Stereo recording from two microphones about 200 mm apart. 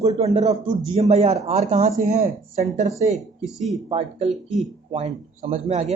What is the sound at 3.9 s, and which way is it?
Speech, 30° right (ahead or behind).